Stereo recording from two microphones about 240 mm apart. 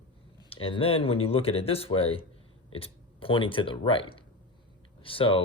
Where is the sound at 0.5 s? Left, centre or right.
Left.